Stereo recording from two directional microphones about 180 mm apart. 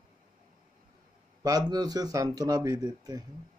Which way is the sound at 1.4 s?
20° right (ahead or behind).